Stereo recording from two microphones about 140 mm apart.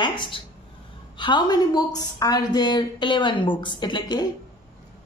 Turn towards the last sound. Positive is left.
turn(degrees=30)  # may be behind; listen again after turning